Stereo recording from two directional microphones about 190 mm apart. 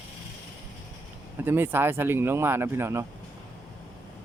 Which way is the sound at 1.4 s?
10° right (ahead or behind).